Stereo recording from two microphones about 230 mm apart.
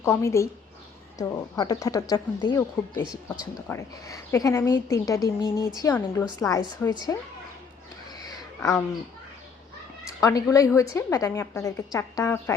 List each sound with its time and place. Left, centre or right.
0.0 s a woman's voice: centre
8.1 s a sound: centre
10.1 s a woman's voice: centre